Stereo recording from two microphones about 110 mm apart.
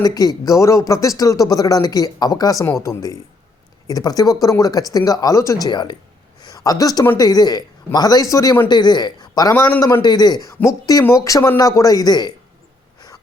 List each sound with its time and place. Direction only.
0.0 s speech: 35° left (ahead or behind)
6.4 s a sound: 35° left (ahead or behind)
7.2 s speech: 35° left (ahead or behind)
9.6 s speech: 20° left (ahead or behind)
10.0 s speech: 40° left (ahead or behind)